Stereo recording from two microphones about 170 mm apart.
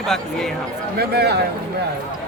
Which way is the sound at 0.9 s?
70° right (ahead or behind).